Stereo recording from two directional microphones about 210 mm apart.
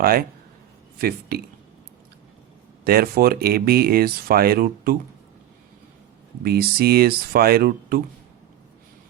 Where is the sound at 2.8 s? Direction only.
45° right (ahead or behind).